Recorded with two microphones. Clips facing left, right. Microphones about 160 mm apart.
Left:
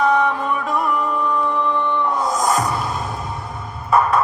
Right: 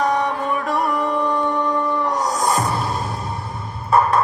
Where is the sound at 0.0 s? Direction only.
40° right (ahead or behind).